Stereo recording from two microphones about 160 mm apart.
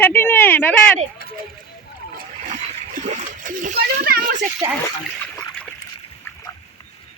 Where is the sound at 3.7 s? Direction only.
75° right (ahead or behind).